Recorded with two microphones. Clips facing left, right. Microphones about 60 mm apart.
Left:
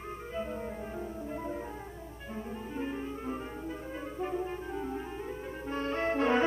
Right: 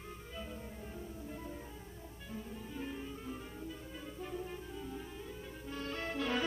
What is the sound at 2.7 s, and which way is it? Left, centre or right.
Music, left.